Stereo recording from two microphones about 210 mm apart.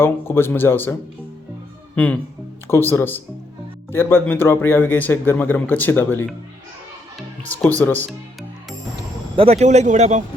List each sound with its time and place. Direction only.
0.0 s a man's voice: 10° left (ahead or behind)
2.0 s a man's voice: 5° left (ahead or behind)
9.3 s speech: 30° right (ahead or behind)